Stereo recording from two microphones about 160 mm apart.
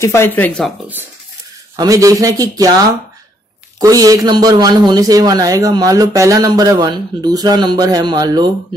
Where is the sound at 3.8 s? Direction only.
20° right (ahead or behind).